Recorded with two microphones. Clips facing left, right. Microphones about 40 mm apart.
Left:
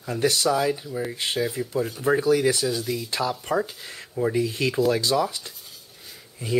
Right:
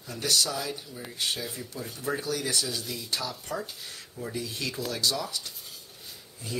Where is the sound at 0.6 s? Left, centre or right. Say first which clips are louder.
Left 11 dB; left.